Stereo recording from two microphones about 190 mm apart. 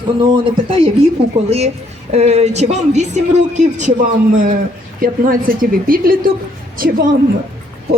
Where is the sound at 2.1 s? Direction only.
35° right (ahead or behind).